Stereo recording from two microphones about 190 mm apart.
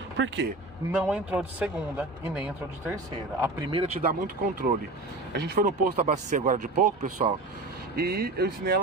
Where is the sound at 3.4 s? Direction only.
25° right (ahead or behind).